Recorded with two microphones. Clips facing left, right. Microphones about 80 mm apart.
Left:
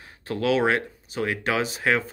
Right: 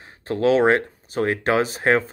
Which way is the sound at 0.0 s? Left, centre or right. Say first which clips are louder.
Right 6 dB; right.